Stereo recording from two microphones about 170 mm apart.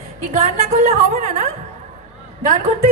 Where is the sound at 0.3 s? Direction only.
40° right (ahead or behind).